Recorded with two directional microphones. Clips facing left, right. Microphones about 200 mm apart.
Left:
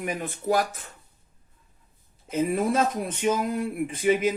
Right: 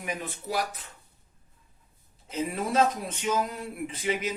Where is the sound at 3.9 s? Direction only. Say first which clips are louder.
Left 8 dB; 50° left (ahead or behind).